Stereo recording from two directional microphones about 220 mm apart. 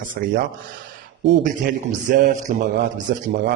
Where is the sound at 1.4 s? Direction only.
35° right (ahead or behind).